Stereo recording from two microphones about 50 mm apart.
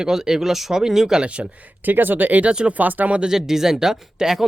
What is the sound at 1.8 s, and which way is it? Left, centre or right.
Speech, right.